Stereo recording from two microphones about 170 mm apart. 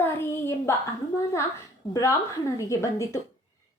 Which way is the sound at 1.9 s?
15° left (ahead or behind).